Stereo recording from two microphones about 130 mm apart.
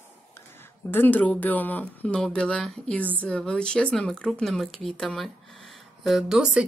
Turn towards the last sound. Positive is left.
turn(degrees=-5)  # may be behind; listen again after turning